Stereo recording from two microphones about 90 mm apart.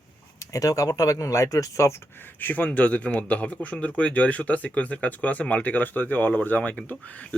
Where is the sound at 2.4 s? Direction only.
20° left (ahead or behind).